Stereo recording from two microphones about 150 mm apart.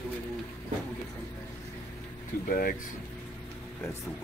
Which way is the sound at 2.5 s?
75° left (ahead or behind).